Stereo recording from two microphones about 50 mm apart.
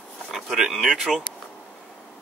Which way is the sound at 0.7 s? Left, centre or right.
Centre.